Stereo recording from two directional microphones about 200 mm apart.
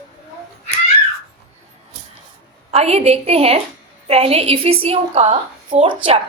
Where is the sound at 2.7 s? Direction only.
30° right (ahead or behind).